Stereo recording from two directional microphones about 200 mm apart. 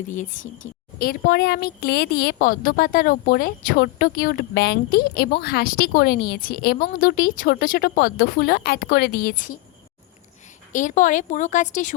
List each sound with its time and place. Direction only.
0.1 s a woman's voice: 40° left (ahead or behind)
10.7 s speech: 40° left (ahead or behind)